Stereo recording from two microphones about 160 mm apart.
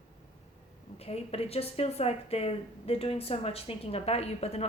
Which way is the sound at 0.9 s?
40° left (ahead or behind).